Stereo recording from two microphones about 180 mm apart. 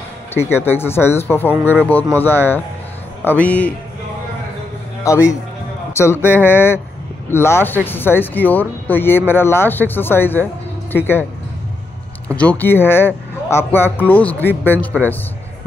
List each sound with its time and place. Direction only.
0.3 s a man's voice: 15° left (ahead or behind)
5.0 s a man's voice: 15° left (ahead or behind)
12.3 s a man's voice: 10° left (ahead or behind)